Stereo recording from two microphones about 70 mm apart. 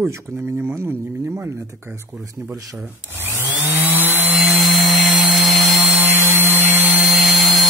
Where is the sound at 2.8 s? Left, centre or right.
Right.